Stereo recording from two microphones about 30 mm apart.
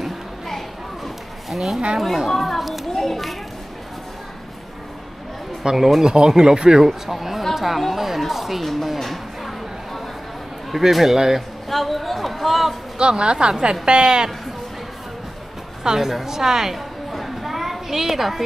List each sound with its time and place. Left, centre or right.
0.0 s a sound: centre
1.5 s speech: centre
2.0 s speech: centre
2.9 s a sound: centre
5.6 s speech: right
6.9 s a woman's voice: centre
9.0 s a sound: centre
10.7 s a woman's voice: centre
11.7 s speech: centre
12.9 s a woman's voice: right
16.0 s speech: centre
16.3 s a woman's voice: centre
16.7 s a sound: centre